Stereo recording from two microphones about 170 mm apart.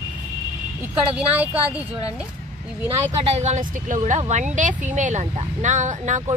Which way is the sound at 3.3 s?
45° right (ahead or behind).